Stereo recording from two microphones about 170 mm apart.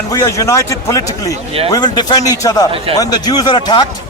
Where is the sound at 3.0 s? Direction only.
20° left (ahead or behind).